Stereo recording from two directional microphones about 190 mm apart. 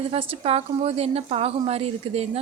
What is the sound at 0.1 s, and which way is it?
A woman's voice, 30° right (ahead or behind).